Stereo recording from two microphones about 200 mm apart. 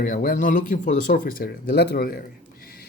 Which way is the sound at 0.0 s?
45° left (ahead or behind).